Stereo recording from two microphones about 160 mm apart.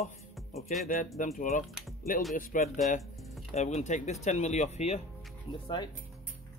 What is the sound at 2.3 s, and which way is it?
Speech, 50° left (ahead or behind).